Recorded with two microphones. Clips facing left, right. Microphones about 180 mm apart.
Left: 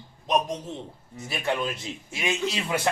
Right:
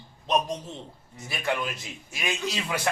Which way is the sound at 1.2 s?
25° left (ahead or behind).